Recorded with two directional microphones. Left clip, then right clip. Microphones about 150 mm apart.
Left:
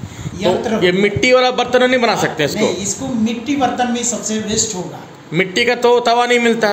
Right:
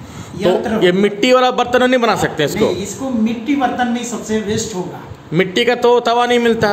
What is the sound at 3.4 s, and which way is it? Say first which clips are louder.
A woman's voice: even; 40° left (ahead or behind).